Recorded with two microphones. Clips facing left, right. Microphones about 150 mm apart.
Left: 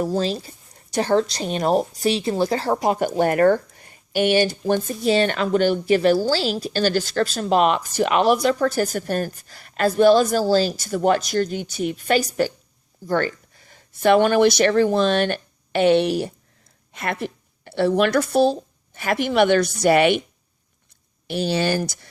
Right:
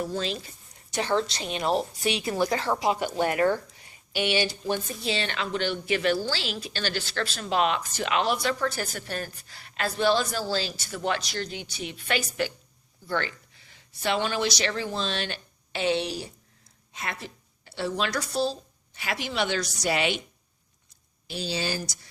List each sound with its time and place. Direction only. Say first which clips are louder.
0.0 s a woman's voice: left 8 dB; 35° left (ahead or behind); by 20.2 s 55° left (ahead or behind)
21.2 s a woman's voice: left 9 dB; 60° left (ahead or behind)